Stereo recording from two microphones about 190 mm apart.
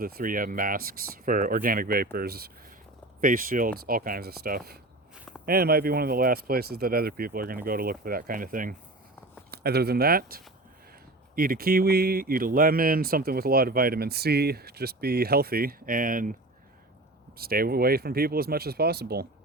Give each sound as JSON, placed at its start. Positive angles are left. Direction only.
{"t": 0.0, "sound": "speech", "side_deg": -50}
{"t": 9.5, "sound": "speech", "side_deg": -55}
{"t": 17.3, "sound": "speech", "side_deg": -55}